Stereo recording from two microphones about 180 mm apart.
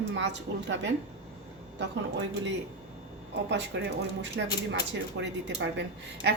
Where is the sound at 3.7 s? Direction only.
65° right (ahead or behind).